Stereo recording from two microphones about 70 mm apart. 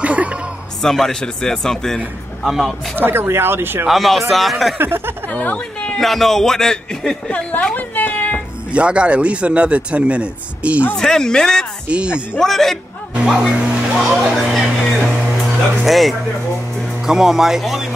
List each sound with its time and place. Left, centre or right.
0.0 s music: centre
0.8 s a man's voice: centre
3.0 s speech: right
3.8 s a man's voice: centre
4.7 s speech: right
5.3 s a woman's voice: left
5.9 s a man's voice: centre
7.2 s a woman's voice: centre
8.7 s a man's voice: centre
11.0 s speech: centre
11.9 s a man's voice: centre
12.4 s a man's voice: centre
13.6 s music: centre
15.8 s a man's voice: centre